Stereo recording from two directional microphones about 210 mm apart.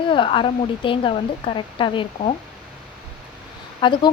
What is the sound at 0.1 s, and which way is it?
Speech, 25° left (ahead or behind).